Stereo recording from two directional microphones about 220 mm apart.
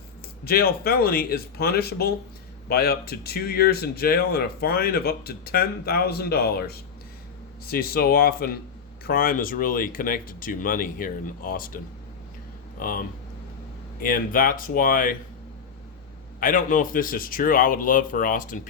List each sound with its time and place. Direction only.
0.4 s speech: 45° left (ahead or behind)
12.8 s speech: 40° left (ahead or behind)
16.4 s speech: 40° left (ahead or behind)